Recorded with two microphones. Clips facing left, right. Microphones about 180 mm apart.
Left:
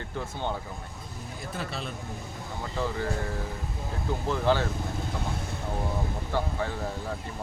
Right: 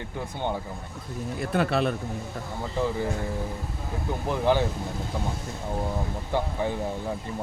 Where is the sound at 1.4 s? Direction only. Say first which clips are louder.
Right 11 dB; 65° right (ahead or behind).